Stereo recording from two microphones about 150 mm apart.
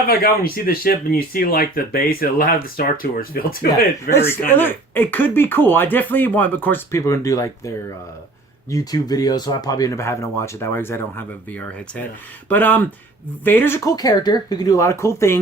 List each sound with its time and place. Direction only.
0.1 s speech: 80° left
4.1 s speech: 15° left (ahead or behind)
8.7 s speech: 25° left (ahead or behind)
12.5 s speech: 10° left (ahead or behind)